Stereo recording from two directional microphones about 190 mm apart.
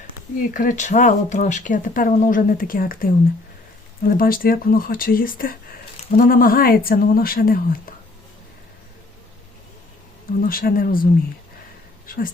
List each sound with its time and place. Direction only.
0.3 s speech: 45° left (ahead or behind)
10.4 s speech: 50° left (ahead or behind)